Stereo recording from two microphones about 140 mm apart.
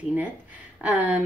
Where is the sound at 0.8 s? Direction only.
10° right (ahead or behind).